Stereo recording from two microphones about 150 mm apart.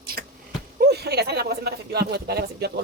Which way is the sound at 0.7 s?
90° right.